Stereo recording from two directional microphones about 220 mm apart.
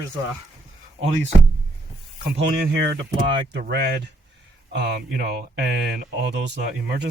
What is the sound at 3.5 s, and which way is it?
Speech, 50° right (ahead or behind).